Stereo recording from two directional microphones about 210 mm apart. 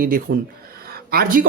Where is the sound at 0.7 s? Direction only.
45° right (ahead or behind).